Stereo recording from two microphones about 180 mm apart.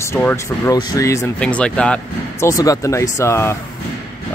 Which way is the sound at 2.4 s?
20° left (ahead or behind).